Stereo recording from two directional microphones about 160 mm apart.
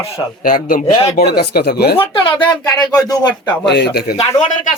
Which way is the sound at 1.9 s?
35° left (ahead or behind).